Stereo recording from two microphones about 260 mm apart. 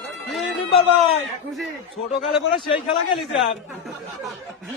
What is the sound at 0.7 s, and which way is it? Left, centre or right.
Speech, left.